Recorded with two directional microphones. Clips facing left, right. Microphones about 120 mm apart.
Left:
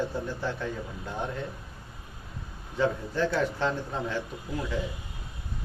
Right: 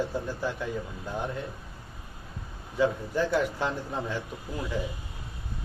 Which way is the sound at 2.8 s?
10° right (ahead or behind).